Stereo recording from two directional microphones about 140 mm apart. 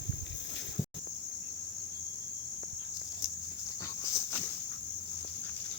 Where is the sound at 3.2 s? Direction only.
25° left (ahead or behind).